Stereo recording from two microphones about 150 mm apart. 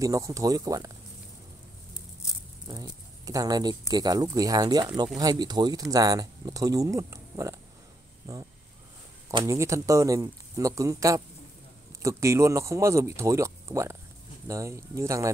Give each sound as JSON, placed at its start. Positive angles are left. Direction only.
{"t": 0.0, "sound": "speech", "side_deg": -20}
{"t": 2.7, "sound": "speech", "side_deg": -25}